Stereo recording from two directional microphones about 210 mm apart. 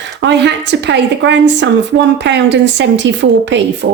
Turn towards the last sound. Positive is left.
turn(degrees=-50)  # may be behind; listen again after turning